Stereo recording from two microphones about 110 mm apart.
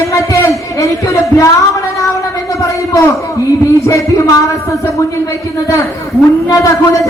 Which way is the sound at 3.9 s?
30° left (ahead or behind).